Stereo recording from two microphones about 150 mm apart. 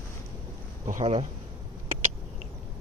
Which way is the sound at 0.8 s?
50° right (ahead or behind).